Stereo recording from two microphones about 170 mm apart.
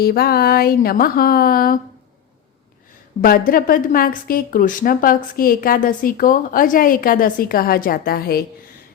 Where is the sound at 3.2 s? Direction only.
60° left (ahead or behind).